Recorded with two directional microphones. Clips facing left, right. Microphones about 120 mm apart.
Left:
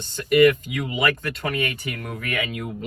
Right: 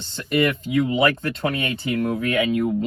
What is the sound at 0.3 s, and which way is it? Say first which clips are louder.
Speech: left 5 dB; 30° right (ahead or behind).